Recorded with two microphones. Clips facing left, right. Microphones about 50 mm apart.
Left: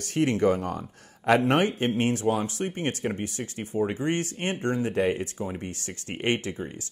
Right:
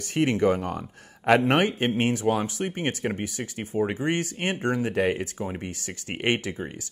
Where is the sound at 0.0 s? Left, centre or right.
Right.